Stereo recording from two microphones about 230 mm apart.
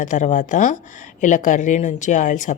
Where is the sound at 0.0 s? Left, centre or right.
Left.